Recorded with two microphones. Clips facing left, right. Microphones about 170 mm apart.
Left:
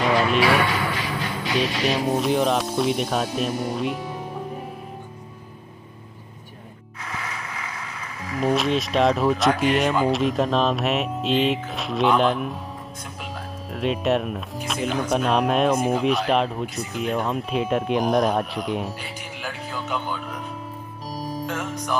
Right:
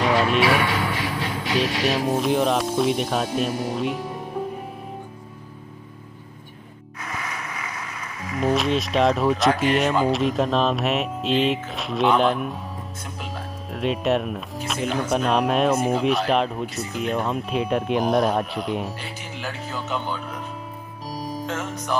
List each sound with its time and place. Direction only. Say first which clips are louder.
0.0 s a sound: even; centre (ahead or behind)
1.6 s speech: even; centre (ahead or behind)
8.3 s speech: even; centre (ahead or behind)
21.1 s music: even; centre (ahead or behind)